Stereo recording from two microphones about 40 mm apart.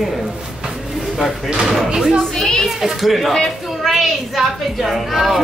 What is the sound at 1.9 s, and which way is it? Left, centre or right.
Speech, centre.